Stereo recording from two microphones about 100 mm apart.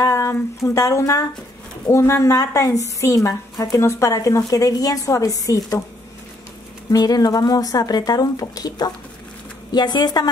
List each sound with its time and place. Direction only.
0.0 s a woman's voice: 30° left (ahead or behind)
6.9 s a woman's voice: 40° left (ahead or behind)